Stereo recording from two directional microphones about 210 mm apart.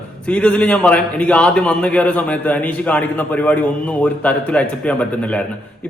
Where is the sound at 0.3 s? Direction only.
5° left (ahead or behind).